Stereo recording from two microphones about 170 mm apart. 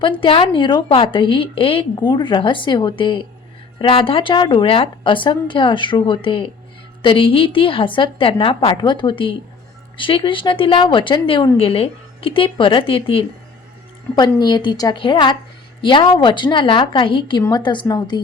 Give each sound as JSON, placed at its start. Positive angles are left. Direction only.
{"t": 0.0, "sound": "a woman's voice", "side_deg": 30}